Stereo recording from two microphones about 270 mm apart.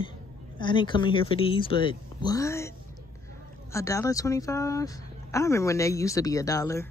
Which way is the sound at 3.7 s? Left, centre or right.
Centre.